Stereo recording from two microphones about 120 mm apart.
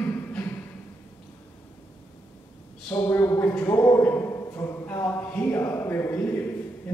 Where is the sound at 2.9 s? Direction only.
20° left (ahead or behind).